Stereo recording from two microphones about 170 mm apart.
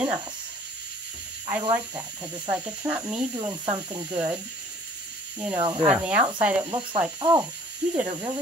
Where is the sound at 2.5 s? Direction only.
10° right (ahead or behind).